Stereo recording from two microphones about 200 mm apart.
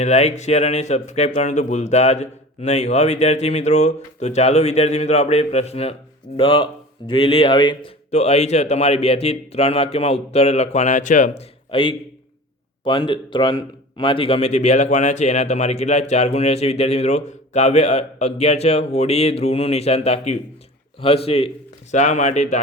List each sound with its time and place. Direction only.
0.0 s a man's voice: 35° left (ahead or behind)